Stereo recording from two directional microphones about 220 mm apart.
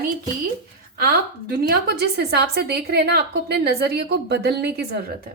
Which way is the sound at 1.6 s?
45° right (ahead or behind).